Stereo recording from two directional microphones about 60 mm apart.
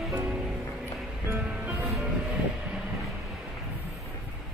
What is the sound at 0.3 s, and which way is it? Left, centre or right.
Music, right.